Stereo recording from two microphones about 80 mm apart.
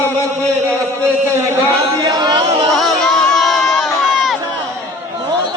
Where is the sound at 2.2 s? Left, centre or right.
Right.